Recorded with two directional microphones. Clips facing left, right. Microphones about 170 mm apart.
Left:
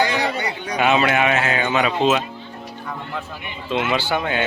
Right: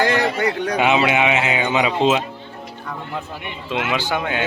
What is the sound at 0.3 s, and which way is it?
Speech, 70° right (ahead or behind).